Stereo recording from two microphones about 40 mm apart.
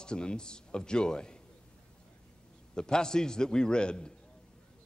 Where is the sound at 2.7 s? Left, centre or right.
Centre.